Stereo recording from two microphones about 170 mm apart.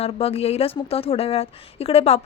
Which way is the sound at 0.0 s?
35° left (ahead or behind).